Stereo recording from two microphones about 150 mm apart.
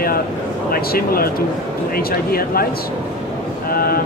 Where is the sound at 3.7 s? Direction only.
80° left.